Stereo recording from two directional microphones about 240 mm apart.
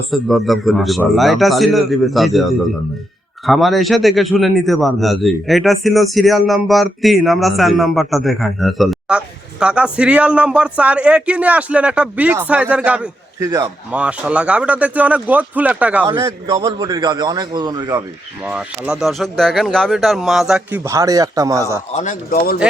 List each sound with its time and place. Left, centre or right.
0.1 s speech: centre
3.4 s speech: centre
16.0 s a man's voice: centre
18.4 s speech: centre
21.9 s speech: left